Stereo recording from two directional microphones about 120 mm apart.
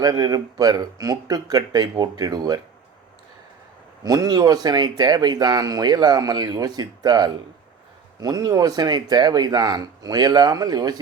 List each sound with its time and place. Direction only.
0.0 s speech: 35° right (ahead or behind)
4.0 s speech: 30° right (ahead or behind)